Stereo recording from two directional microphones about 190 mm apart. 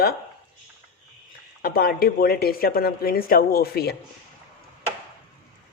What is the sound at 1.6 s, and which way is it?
Speech, 50° left (ahead or behind).